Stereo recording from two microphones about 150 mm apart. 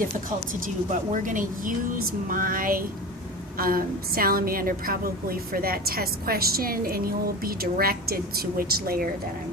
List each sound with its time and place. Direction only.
0.9 s a woman's voice: 60° right (ahead or behind); by 9.0 s 80° right